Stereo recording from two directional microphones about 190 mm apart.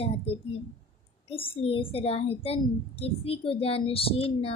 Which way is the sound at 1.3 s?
30° left (ahead or behind).